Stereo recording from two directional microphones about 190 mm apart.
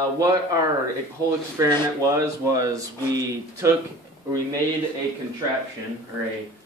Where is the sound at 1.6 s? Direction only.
15° right (ahead or behind).